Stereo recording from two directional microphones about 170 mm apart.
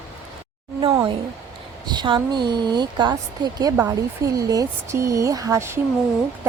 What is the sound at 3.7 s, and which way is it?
A woman's voice, 15° right (ahead or behind).